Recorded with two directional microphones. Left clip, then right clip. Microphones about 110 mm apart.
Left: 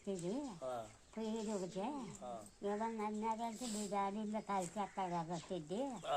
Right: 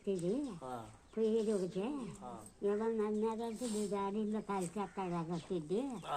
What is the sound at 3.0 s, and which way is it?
Speech, 30° left (ahead or behind).